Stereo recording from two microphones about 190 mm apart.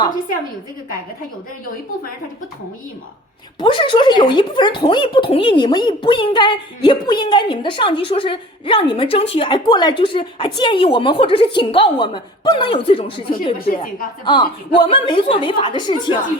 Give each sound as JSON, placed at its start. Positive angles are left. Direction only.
{"t": 3.6, "sound": "a woman's voice", "side_deg": 25}